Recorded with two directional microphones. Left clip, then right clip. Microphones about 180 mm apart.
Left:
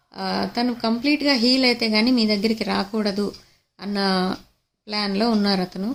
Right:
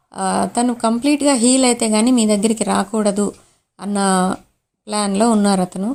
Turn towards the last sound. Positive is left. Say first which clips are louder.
# right 5 dB
turn(degrees=-35)  # may be behind; listen again after turning